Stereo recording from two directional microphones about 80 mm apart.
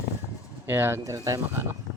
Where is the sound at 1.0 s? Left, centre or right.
Right.